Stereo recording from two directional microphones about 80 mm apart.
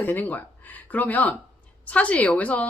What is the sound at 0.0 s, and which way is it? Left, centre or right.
A woman's voice, left.